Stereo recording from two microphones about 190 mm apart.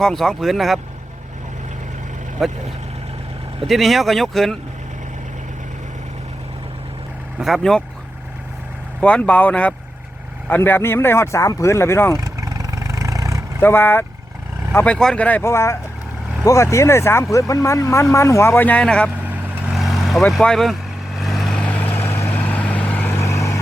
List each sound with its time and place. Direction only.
0.0 s speech: centre (ahead or behind)
2.4 s speech: centre (ahead or behind)
3.7 s speech: centre (ahead or behind)
7.3 s speech: centre (ahead or behind)
9.0 s speech: 5° left (ahead or behind)
12.2 s vehicle: 15° right (ahead or behind)
13.6 s speech: 10° left (ahead or behind)
19.1 s vehicle: 5° right (ahead or behind); by 23.6 s 15° left (ahead or behind)